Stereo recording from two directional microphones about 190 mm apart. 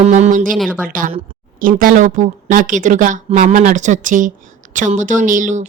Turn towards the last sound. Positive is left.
turn(degrees=-40)  # may be behind; listen again after turning